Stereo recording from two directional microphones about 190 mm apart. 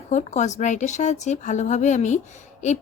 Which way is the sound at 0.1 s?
40° left (ahead or behind).